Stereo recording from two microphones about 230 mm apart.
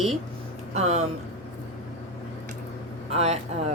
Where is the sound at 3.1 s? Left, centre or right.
Right.